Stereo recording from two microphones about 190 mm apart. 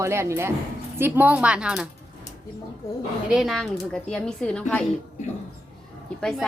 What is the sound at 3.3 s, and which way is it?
Speech, centre (ahead or behind).